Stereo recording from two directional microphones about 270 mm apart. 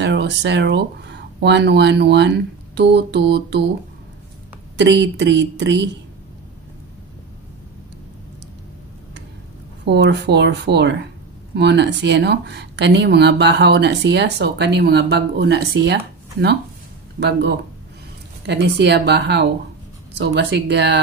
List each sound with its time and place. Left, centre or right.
0.0 s speech: right
4.7 s speech: right
9.8 s speech: right